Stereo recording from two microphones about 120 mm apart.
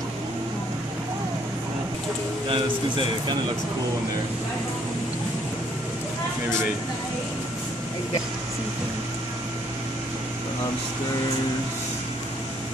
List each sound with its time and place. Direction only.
2.4 s a man's voice: 45° right (ahead or behind)